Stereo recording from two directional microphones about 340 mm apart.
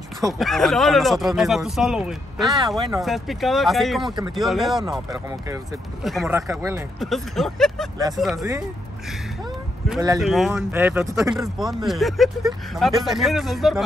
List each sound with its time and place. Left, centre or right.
0.2 s speech: centre
9.8 s speech: centre